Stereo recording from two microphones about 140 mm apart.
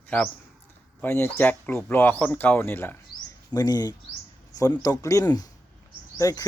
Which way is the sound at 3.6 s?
30° left (ahead or behind).